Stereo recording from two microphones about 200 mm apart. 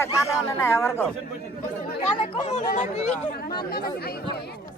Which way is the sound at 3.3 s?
50° left (ahead or behind).